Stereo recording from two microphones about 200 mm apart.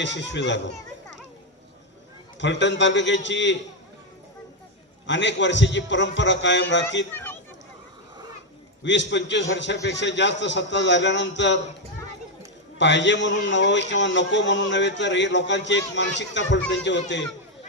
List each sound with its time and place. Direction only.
0.0 s speech: 65° left (ahead or behind)
2.4 s speech: 65° left (ahead or behind)
5.0 s speech: 65° left (ahead or behind)
7.1 s chatter: 10° left (ahead or behind)
8.8 s speech: 65° left (ahead or behind)
12.8 s speech: 65° left (ahead or behind)